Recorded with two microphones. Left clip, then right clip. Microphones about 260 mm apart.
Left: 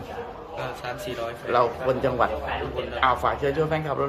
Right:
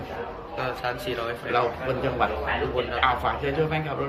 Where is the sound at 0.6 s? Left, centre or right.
Centre.